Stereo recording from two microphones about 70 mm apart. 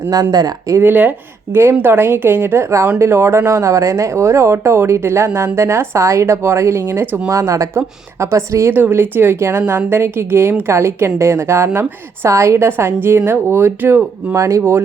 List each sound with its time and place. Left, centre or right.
0.1 s speech: right
0.8 s a woman's voice: right
7.3 s a woman's voice: right
8.7 s a woman's voice: right
14.3 s a woman's voice: right